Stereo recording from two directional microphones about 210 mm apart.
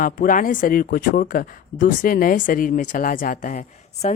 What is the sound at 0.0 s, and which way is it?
Speech, 40° left (ahead or behind).